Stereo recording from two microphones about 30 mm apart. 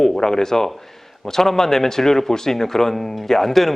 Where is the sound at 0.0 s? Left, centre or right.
Centre.